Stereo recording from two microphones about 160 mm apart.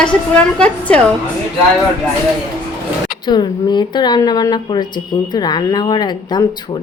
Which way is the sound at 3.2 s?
25° left (ahead or behind).